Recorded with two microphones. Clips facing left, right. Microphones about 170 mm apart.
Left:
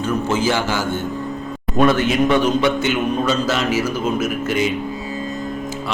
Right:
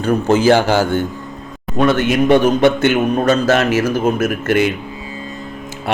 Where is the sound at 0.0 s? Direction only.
60° right (ahead or behind).